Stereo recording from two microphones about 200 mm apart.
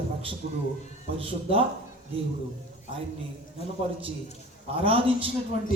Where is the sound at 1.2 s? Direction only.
25° right (ahead or behind).